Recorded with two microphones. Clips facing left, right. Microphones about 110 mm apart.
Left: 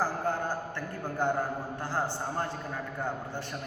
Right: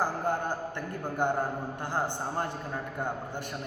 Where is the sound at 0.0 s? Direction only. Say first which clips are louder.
Right 1 dB; 15° right (ahead or behind).